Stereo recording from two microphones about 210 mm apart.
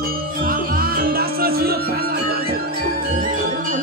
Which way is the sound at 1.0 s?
45° right (ahead or behind).